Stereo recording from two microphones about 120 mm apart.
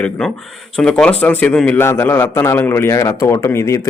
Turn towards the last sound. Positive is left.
turn(degrees=25)  # may be behind; listen again after turning